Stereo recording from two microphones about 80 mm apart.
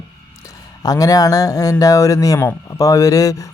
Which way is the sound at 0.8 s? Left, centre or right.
Left.